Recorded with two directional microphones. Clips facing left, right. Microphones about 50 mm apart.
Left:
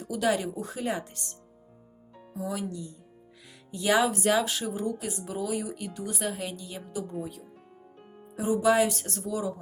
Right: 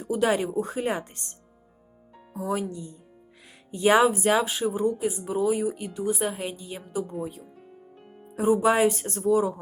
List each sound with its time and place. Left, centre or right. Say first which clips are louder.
0.1 s speech: right 4 dB; right
2.5 s speech: right 6 dB; right
3.4 s music: right 6 dB; right
4.1 s speech: right 2 dB; right; by 6.3 s centre
6.3 s speech: right 2 dB; right
8.4 s speech: right 3 dB; right